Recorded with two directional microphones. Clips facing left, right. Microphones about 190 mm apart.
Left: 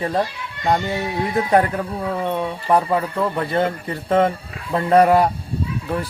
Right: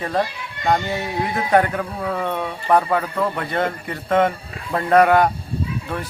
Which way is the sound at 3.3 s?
30° left (ahead or behind).